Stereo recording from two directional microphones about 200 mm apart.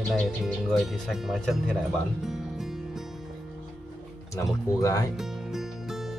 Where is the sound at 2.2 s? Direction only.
Centre (ahead or behind).